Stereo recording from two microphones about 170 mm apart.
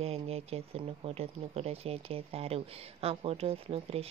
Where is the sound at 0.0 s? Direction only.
35° right (ahead or behind).